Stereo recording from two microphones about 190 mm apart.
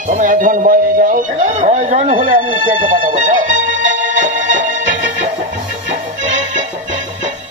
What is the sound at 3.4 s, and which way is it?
Music, 90° right.